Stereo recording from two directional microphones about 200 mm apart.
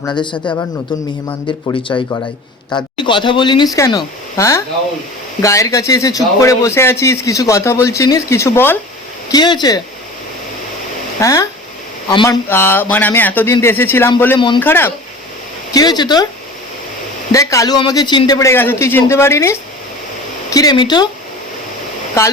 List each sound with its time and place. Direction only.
0.0 s a man's voice: 20° left (ahead or behind)
11.2 s a man's voice: 15° left (ahead or behind)
14.3 s speech: 25° left (ahead or behind)
14.6 s a man's voice: 10° left (ahead or behind)
17.3 s a man's voice: 15° left (ahead or behind)